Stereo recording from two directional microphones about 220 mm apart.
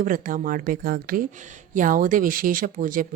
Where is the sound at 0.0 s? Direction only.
35° right (ahead or behind).